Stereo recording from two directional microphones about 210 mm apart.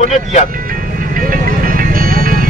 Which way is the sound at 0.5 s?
40° right (ahead or behind).